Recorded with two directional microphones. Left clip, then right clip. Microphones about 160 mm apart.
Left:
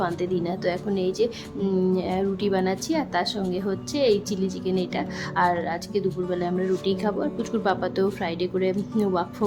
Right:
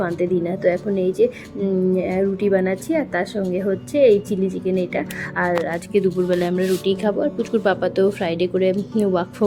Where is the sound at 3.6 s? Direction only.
15° right (ahead or behind).